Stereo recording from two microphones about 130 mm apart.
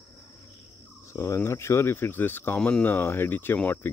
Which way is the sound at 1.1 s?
20° left (ahead or behind).